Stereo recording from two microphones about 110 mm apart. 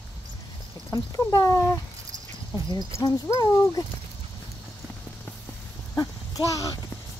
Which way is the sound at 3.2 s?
30° left (ahead or behind).